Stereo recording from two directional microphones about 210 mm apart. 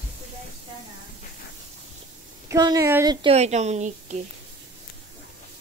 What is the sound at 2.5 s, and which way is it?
Speech, 15° right (ahead or behind).